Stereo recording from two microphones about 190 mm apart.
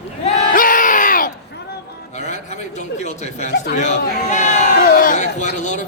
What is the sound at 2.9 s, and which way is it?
A man's voice, 40° left (ahead or behind).